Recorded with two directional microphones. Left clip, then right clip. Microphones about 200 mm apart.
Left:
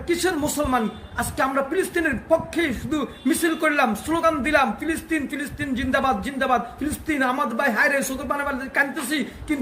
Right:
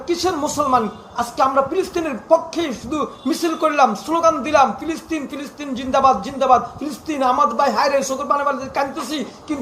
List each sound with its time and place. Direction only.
0.1 s speech: 20° left (ahead or behind)